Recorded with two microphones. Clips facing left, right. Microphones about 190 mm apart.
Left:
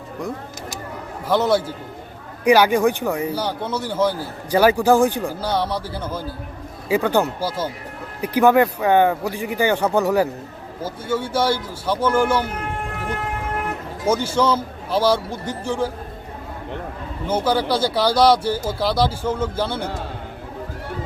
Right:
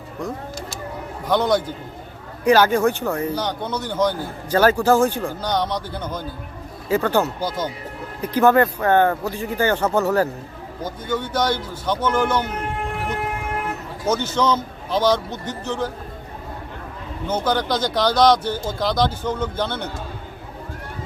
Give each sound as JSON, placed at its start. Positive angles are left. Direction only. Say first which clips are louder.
{"t": 1.3, "sound": "speech", "louder": "left 1 dB", "side_deg": 5}
{"t": 14.1, "sound": "speech", "louder": "left 1 dB", "side_deg": 10}
{"t": 17.2, "sound": "speech", "louder": "left 2 dB", "side_deg": 10}